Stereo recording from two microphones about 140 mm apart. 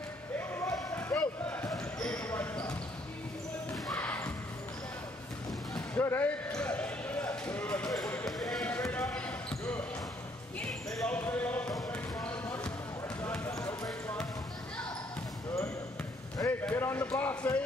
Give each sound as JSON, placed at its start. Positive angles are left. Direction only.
{"t": 0.4, "sound": "a sound", "side_deg": 15}
{"t": 2.0, "sound": "basketball bounce", "side_deg": 10}
{"t": 3.7, "sound": "basketball bounce", "side_deg": 0}
{"t": 4.0, "sound": "basketball bounce", "side_deg": 10}
{"t": 5.8, "sound": "basketball bounce", "side_deg": 15}
{"t": 8.8, "sound": "basketball bounce", "side_deg": 20}
{"t": 9.1, "sound": "a sound", "side_deg": 10}
{"t": 10.9, "sound": "basketball bounce", "side_deg": 5}
{"t": 16.3, "sound": "a sound", "side_deg": 15}